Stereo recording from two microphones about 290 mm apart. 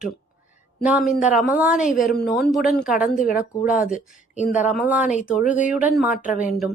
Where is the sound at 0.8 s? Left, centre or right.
Centre.